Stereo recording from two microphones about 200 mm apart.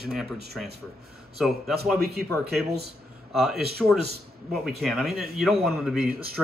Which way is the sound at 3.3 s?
Centre (ahead or behind).